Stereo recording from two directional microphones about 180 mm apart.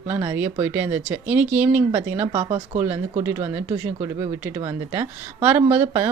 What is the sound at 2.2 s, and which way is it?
Speech, 30° right (ahead or behind).